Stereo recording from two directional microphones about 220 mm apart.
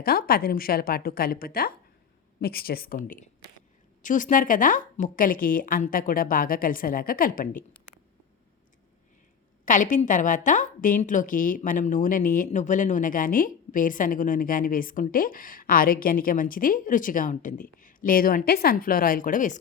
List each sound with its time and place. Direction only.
0.0 s a woman's voice: 45° left (ahead or behind)
9.6 s a woman's voice: 35° left (ahead or behind)